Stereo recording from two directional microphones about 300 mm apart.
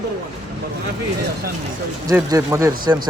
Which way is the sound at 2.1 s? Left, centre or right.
Centre.